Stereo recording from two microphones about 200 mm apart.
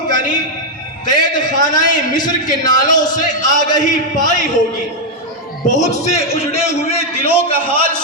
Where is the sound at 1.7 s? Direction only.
20° left (ahead or behind).